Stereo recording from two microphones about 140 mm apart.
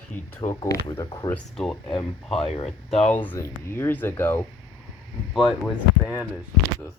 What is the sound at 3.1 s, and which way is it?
Speech, 10° left (ahead or behind).